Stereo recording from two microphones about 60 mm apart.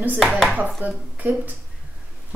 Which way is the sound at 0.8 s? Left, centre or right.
Right.